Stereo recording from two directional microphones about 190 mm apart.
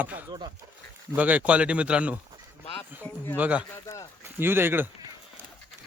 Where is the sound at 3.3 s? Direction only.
10° right (ahead or behind).